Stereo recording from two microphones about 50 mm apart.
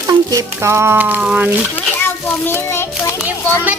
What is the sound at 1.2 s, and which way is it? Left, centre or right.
Speech, right.